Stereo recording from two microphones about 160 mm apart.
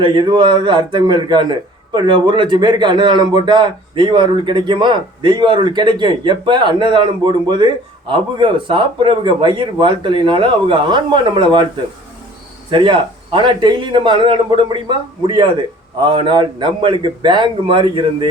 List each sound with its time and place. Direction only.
0.0 s a man's voice: 30° right (ahead or behind)
13.3 s a man's voice: 30° right (ahead or behind)